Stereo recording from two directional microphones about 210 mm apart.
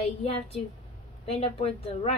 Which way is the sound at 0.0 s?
30° left (ahead or behind).